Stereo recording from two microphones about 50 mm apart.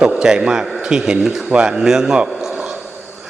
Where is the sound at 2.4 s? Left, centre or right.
Centre.